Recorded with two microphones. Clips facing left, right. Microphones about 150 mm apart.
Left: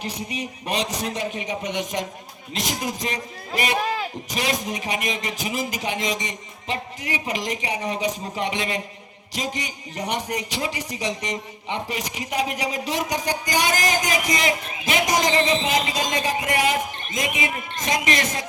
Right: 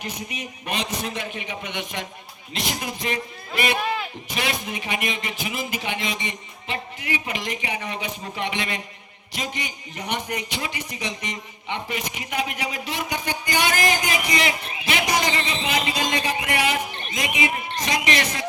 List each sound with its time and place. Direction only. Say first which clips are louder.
0.0 s a man's voice: left 3 dB; 35° left (ahead or behind)